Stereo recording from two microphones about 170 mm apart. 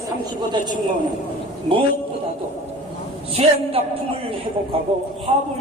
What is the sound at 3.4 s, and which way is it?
Speech, 35° right (ahead or behind).